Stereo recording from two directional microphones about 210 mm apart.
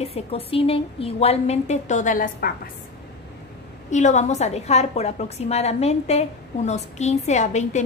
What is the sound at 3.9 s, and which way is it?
A woman's voice, 35° left (ahead or behind).